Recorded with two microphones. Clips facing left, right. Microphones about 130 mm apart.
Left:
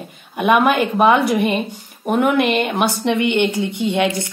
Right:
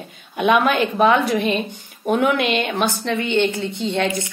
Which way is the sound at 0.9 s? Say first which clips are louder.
Left 1 dB; 10° left (ahead or behind).